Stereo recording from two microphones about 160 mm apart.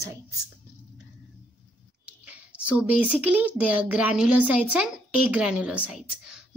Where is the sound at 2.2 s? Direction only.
5° right (ahead or behind).